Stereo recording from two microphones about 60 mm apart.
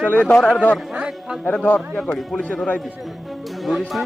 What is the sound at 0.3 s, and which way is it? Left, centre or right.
Speech, centre.